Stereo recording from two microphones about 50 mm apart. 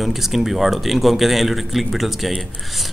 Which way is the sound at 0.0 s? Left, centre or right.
Centre.